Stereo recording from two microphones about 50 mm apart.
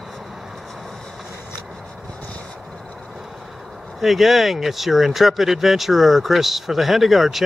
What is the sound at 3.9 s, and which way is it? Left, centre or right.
Speech, centre.